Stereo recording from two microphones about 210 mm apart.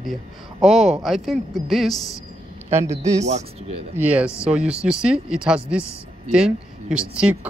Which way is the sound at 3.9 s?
5° right (ahead or behind).